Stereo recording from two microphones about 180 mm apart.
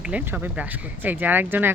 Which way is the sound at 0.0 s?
5° right (ahead or behind).